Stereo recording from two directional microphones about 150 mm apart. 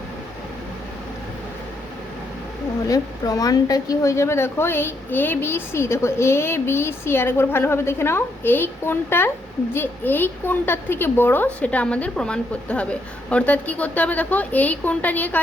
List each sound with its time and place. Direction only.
2.8 s a woman's voice: 25° left (ahead or behind)